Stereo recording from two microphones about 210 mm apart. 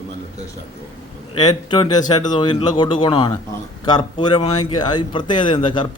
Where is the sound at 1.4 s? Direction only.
20° left (ahead or behind).